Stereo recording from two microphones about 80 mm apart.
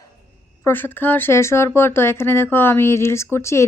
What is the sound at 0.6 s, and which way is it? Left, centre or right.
Speech, left.